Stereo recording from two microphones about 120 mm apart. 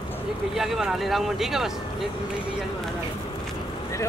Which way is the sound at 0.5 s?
Centre (ahead or behind).